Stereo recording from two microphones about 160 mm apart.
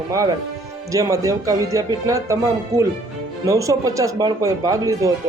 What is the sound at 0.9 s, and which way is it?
Speech, 20° right (ahead or behind).